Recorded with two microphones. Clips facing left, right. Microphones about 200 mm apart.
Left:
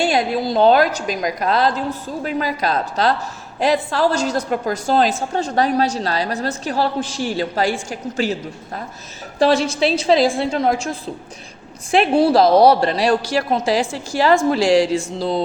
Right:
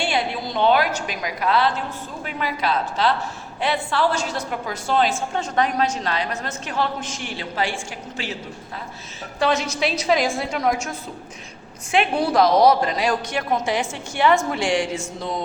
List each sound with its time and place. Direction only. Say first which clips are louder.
0.0 s a woman's voice: left 6 dB; 40° left (ahead or behind)
9.4 s a woman's voice: left 6 dB; 30° left (ahead or behind)